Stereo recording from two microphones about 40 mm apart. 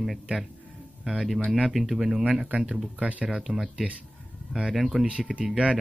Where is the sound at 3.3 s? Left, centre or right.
Centre.